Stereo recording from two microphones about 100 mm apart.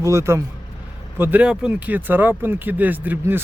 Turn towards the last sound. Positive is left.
turn(degrees=-20)  # may be behind; listen again after turning